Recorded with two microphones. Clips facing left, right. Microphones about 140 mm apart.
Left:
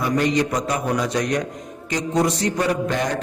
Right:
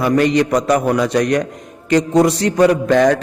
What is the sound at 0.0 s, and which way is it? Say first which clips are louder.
Mantra: right 6 dB; 65° right (ahead or behind).